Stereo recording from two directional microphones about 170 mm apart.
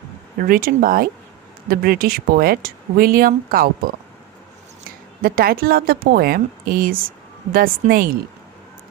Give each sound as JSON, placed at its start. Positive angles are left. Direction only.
{"t": 0.3, "sound": "speech", "side_deg": -60}
{"t": 5.2, "sound": "speech", "side_deg": -55}